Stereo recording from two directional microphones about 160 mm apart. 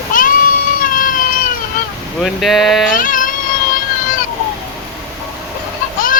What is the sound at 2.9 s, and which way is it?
Music, 55° left (ahead or behind).